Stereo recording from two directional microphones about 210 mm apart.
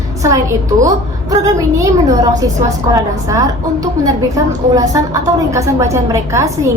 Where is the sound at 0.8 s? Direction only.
15° right (ahead or behind).